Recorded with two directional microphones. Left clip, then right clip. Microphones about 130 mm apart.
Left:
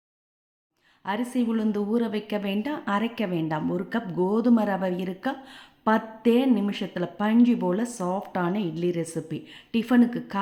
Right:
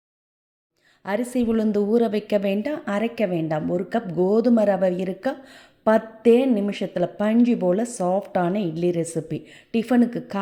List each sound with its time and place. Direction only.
1.3 s a woman's voice: 35° right (ahead or behind)
2.7 s a woman's voice: 20° right (ahead or behind)